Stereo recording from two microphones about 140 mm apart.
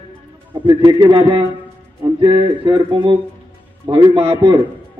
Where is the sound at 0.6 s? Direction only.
35° right (ahead or behind).